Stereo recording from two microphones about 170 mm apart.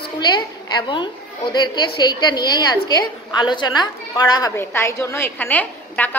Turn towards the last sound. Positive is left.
turn(degrees=10)  # may be behind; listen again after turning